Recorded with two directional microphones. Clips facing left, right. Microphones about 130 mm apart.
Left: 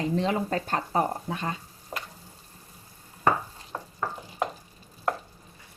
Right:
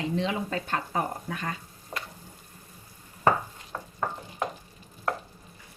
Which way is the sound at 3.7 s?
25° left (ahead or behind).